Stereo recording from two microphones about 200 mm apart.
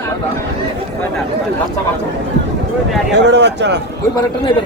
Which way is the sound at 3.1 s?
60° right (ahead or behind).